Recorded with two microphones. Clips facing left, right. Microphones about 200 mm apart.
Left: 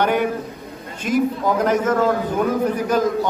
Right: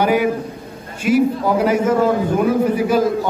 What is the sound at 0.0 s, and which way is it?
A man's voice, 5° right (ahead or behind).